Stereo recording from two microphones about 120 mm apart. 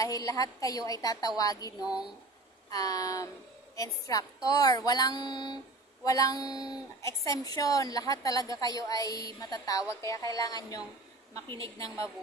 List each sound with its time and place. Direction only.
0.0 s a woman's voice: 30° left (ahead or behind)